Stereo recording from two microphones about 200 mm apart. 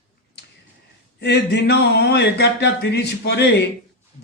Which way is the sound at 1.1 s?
55° left (ahead or behind).